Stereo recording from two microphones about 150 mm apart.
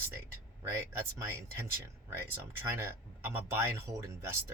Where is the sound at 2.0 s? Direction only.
15° right (ahead or behind).